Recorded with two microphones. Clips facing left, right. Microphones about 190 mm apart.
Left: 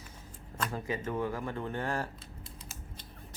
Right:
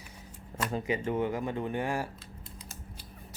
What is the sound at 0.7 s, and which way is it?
Speech, 15° right (ahead or behind).